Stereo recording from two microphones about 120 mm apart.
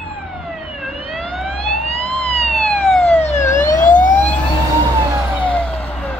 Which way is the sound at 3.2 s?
85° left.